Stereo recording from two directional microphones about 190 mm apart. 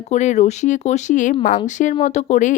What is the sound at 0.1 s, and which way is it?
Speech, 40° left (ahead or behind).